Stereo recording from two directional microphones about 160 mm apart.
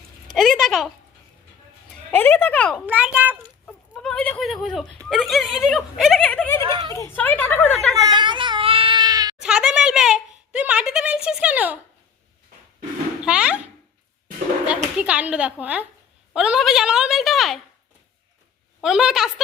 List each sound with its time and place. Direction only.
0.3 s speech: centre (ahead or behind)
1.9 s speech: 10° left (ahead or behind)
2.7 s speech: 10° right (ahead or behind)
3.7 s speech: 5° left (ahead or behind)
6.6 s speech: 30° right (ahead or behind)
6.8 s a woman's voice: 20° left (ahead or behind)
8.0 s a sound: 30° right (ahead or behind)
9.4 s a sound: 5° right (ahead or behind)
13.2 s a sound: 5° right (ahead or behind)
14.9 s a woman's voice: 10° right (ahead or behind)
18.8 s a woman's voice: 5° right (ahead or behind)